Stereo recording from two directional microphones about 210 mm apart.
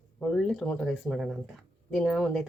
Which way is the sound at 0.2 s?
Centre (ahead or behind).